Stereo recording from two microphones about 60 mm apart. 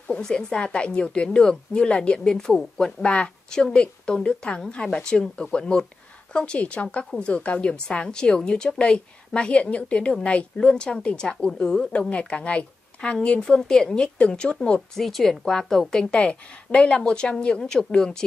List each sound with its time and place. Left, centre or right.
0.1 s a woman's voice: centre
15.0 s a woman's voice: centre